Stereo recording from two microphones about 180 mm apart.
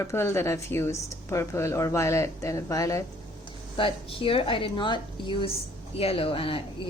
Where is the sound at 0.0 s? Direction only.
15° left (ahead or behind).